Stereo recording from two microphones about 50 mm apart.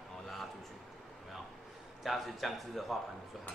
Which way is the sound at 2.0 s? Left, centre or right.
Centre.